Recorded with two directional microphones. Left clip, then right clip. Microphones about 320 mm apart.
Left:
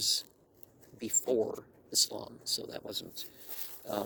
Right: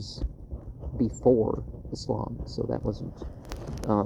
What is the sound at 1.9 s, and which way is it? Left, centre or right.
Speech, left.